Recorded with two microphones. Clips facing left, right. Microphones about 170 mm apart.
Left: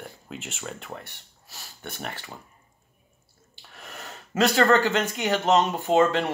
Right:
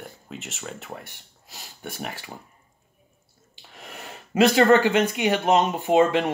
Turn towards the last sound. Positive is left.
turn(degrees=-15)  # may be behind; listen again after turning